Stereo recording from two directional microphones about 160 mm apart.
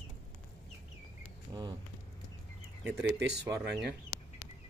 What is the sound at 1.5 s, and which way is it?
Speech, 20° right (ahead or behind).